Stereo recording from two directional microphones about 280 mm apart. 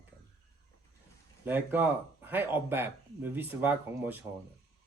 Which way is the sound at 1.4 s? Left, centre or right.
Centre.